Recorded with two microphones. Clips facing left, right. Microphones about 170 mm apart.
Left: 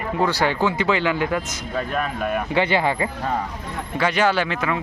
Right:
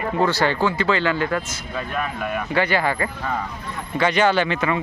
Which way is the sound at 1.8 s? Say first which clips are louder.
Left 2 dB; 40° left (ahead or behind).